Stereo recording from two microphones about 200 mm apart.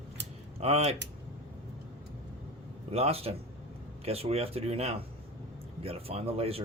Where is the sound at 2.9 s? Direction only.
30° right (ahead or behind).